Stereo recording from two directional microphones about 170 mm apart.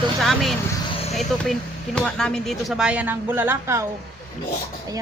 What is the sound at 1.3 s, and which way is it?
A woman's voice, centre (ahead or behind).